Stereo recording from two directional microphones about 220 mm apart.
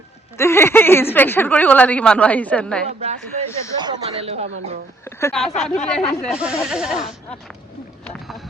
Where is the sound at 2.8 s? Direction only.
30° right (ahead or behind).